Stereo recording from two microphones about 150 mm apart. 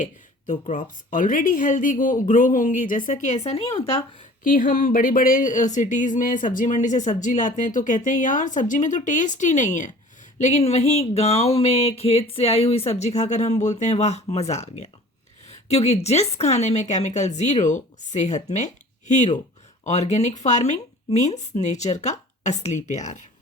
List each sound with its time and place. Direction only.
0.0 s speech: 55° left (ahead or behind)
4.4 s speech: 65° left (ahead or behind)